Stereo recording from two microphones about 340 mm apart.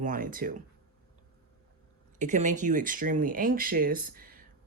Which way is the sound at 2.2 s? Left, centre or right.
Right.